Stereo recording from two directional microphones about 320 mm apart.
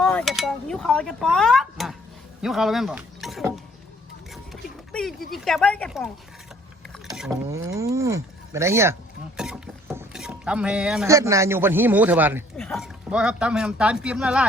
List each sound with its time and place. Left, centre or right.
0.0 s speech: centre
4.9 s a sound: centre
5.3 s speech: centre
7.1 s speech: centre